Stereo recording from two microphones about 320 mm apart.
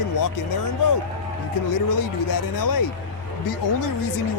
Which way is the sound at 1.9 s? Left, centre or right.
Left.